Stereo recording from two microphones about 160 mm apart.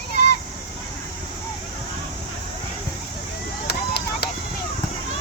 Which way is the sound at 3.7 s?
90° left.